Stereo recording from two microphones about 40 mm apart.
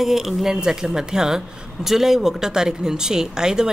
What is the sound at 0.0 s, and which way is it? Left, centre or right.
Speech, centre.